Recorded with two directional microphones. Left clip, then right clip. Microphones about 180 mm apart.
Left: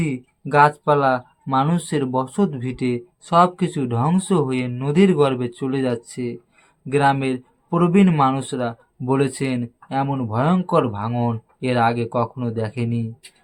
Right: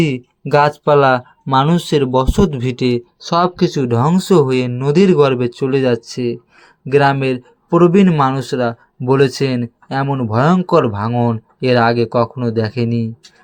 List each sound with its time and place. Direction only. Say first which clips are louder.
0.0 s speech: right 8 dB; 45° right (ahead or behind)